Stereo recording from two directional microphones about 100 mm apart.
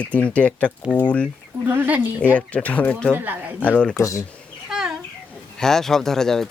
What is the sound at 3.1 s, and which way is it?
Speech, 20° right (ahead or behind).